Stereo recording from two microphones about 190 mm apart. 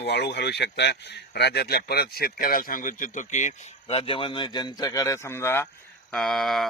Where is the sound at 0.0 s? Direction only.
65° left (ahead or behind); by 5.6 s 10° left (ahead or behind).